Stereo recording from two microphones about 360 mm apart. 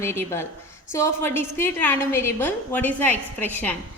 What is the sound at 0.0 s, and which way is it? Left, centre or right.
A woman's voice, centre.